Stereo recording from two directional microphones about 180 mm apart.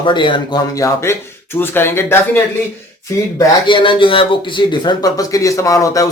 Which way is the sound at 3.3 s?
30° left (ahead or behind).